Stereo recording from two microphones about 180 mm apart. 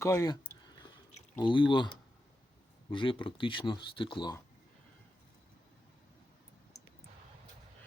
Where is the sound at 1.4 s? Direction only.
25° left (ahead or behind).